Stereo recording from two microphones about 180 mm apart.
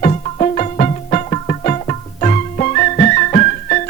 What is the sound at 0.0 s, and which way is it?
Music, 40° left (ahead or behind).